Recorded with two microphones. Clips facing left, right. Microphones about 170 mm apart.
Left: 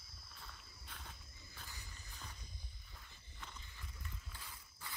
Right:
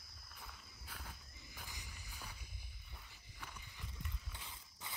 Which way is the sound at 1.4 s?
15° right (ahead or behind).